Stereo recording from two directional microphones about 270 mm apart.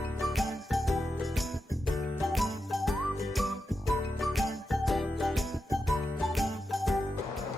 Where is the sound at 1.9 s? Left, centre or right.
Centre.